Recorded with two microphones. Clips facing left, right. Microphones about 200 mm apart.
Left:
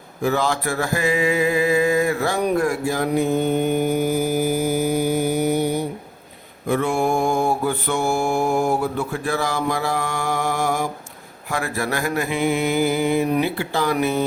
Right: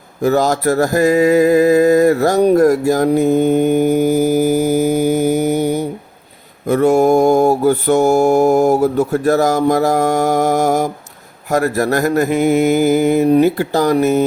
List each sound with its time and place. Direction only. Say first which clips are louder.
0.2 s mantra: right 7 dB; 40° right (ahead or behind)